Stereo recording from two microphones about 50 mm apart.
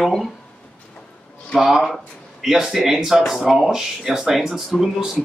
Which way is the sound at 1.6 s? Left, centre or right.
Centre.